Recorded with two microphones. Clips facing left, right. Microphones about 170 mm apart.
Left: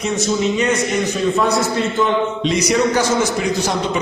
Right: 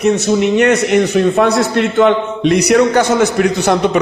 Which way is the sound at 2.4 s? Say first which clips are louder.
Right 9 dB; 65° right (ahead or behind).